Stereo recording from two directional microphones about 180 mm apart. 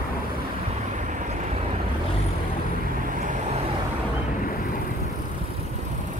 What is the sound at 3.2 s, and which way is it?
Vehicle, 45° right (ahead or behind).